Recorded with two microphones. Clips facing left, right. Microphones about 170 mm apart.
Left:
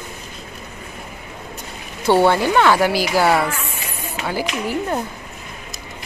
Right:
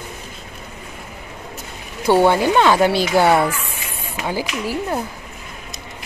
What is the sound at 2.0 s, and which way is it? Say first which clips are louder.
Speech: right 1 dB; 15° right (ahead or behind).